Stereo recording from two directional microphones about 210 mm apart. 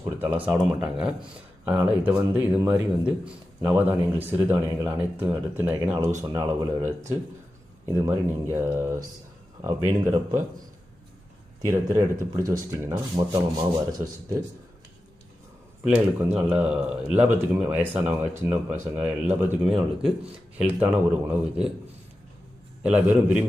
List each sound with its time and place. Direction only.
0.0 s speech: 10° right (ahead or behind)
11.6 s speech: 15° right (ahead or behind)
15.9 s speech: 5° right (ahead or behind)
22.8 s speech: 5° right (ahead or behind)